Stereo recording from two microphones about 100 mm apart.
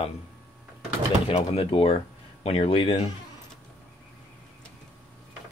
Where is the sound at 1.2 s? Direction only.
80° left; by 3.1 s 65° left (ahead or behind).